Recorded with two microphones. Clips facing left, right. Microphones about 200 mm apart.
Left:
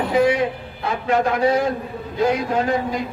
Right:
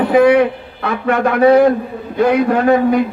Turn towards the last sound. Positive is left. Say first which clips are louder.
# right 9 dB
turn(degrees=-65)  # may be behind; listen again after turning